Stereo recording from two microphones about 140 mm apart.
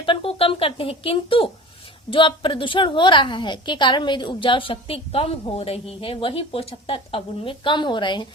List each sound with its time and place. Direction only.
0.0 s a woman's voice: 40° left (ahead or behind)